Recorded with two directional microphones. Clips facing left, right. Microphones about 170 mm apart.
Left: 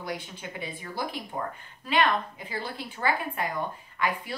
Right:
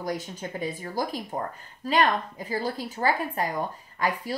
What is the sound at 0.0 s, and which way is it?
A woman's voice, 40° right (ahead or behind).